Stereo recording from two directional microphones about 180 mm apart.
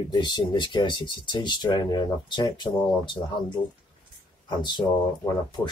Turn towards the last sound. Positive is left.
turn(degrees=10)  # may be behind; listen again after turning